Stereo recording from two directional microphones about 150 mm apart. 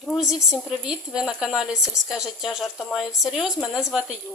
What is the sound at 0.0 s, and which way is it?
Speech, centre (ahead or behind).